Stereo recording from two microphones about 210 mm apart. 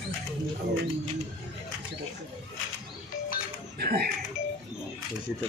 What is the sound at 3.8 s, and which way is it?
Doorbell, 45° right (ahead or behind).